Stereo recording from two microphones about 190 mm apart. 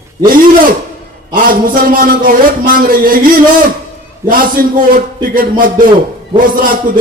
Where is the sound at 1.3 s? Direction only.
45° right (ahead or behind).